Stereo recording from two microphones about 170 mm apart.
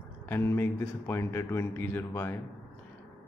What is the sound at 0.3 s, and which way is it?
Speech, 15° left (ahead or behind).